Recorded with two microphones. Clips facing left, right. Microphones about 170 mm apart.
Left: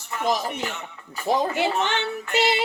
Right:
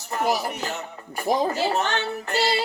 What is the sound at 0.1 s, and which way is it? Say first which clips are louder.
Speech: right 3 dB; 40° right (ahead or behind).